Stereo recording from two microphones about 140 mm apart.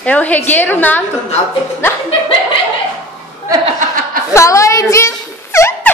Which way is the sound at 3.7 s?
80° right.